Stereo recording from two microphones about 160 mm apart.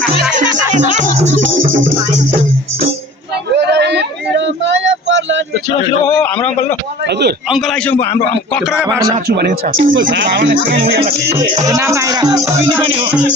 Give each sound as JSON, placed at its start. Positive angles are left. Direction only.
{"t": 0.3, "sound": "speech", "side_deg": -50}
{"t": 3.5, "sound": "a sound", "side_deg": -90}
{"t": 7.1, "sound": "speech", "side_deg": -90}
{"t": 7.9, "sound": "a man's voice", "side_deg": 10}
{"t": 9.2, "sound": "speech", "side_deg": -80}
{"t": 11.0, "sound": "music", "side_deg": -40}
{"t": 11.7, "sound": "speech", "side_deg": -20}